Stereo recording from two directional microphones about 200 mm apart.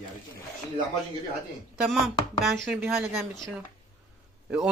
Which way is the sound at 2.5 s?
Centre (ahead or behind).